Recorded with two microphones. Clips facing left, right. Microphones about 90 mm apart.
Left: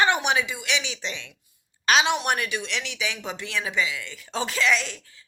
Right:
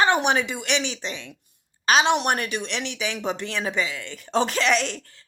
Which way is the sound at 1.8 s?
40° right (ahead or behind).